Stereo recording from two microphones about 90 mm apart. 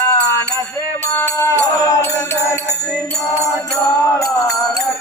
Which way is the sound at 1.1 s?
30° left (ahead or behind).